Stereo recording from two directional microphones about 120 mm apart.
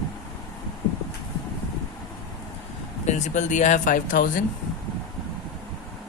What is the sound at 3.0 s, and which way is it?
Speech, 80° left.